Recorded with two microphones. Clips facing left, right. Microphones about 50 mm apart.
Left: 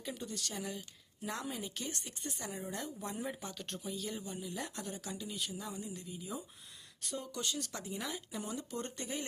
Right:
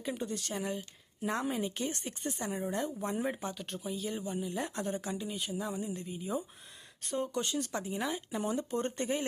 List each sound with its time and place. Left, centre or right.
0.0 s speech: right
3.5 s speech: centre
4.1 s speech: right
4.7 s speech: right
8.4 s speech: right